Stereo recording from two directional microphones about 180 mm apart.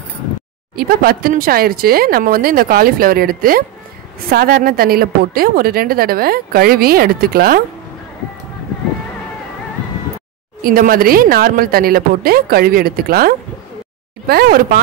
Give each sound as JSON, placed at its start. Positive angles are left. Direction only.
{"t": 0.7, "sound": "a woman's voice", "side_deg": -55}
{"t": 10.6, "sound": "a woman's voice", "side_deg": -50}